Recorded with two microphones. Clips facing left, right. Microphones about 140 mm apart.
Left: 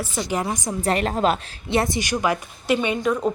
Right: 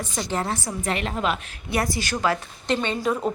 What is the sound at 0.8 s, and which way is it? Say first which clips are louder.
Speech: left 5 dB; 40° left (ahead or behind).